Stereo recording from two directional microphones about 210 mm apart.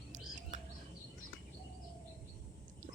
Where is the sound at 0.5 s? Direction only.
35° right (ahead or behind).